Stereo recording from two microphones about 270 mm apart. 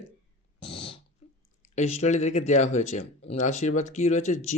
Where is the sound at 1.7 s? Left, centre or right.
Left.